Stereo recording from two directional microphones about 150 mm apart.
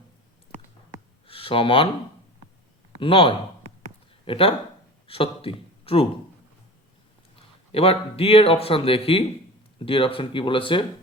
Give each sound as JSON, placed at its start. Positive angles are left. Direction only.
{"t": 1.3, "sound": "speech", "side_deg": 40}
{"t": 3.0, "sound": "speech", "side_deg": 35}
{"t": 7.3, "sound": "a man's voice", "side_deg": 40}